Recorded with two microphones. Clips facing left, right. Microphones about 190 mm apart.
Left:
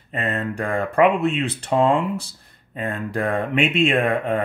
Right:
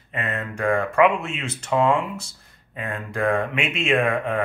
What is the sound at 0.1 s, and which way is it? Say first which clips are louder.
Speech: left 4 dB; 35° left (ahead or behind).